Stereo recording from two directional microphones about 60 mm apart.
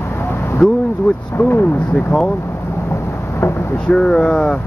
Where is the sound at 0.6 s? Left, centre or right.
Centre.